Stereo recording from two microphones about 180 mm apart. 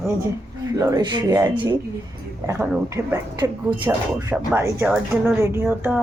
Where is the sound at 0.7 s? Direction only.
20° right (ahead or behind).